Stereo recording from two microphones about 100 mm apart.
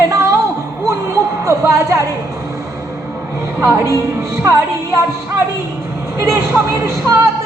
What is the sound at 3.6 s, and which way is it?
Speech, 25° right (ahead or behind).